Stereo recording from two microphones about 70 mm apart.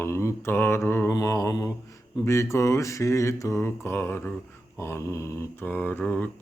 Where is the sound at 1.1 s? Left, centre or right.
Left.